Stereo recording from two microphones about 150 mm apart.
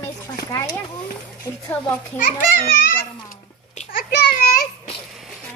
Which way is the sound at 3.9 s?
75° left (ahead or behind).